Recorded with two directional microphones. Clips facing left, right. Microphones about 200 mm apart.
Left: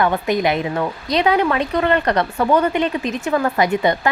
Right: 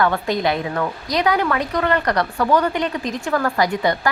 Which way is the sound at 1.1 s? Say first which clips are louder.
Left 3 dB; 25° left (ahead or behind).